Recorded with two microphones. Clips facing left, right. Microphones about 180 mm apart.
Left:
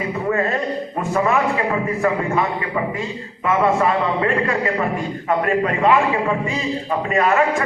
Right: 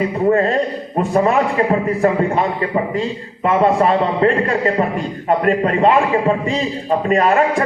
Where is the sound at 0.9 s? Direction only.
30° right (ahead or behind).